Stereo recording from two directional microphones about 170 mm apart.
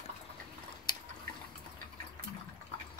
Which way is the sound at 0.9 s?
25° left (ahead or behind).